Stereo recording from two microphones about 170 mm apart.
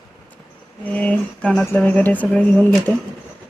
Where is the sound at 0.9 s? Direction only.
10° left (ahead or behind).